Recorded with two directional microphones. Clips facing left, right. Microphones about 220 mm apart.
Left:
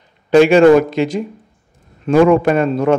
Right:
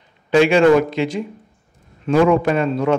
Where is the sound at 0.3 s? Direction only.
40° left (ahead or behind).